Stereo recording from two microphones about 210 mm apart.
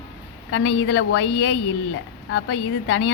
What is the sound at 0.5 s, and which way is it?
A woman's voice, 60° left (ahead or behind).